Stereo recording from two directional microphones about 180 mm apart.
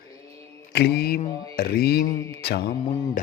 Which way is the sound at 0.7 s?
65° left (ahead or behind).